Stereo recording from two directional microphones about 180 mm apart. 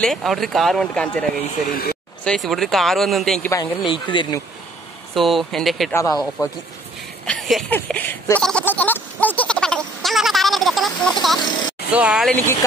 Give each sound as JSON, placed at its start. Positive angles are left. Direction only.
{"t": 0.0, "sound": "speech", "side_deg": 0}
{"t": 1.7, "sound": "speech", "side_deg": 55}
{"t": 2.2, "sound": "speech", "side_deg": 0}
{"t": 3.4, "sound": "speech", "side_deg": 15}
{"t": 3.8, "sound": "speech", "side_deg": 25}
{"t": 5.1, "sound": "speech", "side_deg": 0}
{"t": 5.9, "sound": "speech", "side_deg": 20}
{"t": 7.2, "sound": "a sound", "side_deg": 0}
{"t": 11.9, "sound": "speech", "side_deg": -5}
{"t": 12.3, "sound": "speech", "side_deg": 10}